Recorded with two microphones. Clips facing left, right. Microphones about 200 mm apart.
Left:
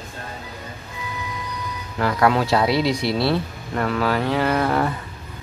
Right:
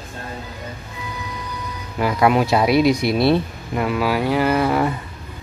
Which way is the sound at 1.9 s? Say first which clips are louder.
Right 2 dB; 15° right (ahead or behind).